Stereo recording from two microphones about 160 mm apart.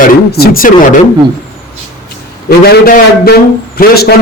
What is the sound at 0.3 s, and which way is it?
Speech, 75° left (ahead or behind).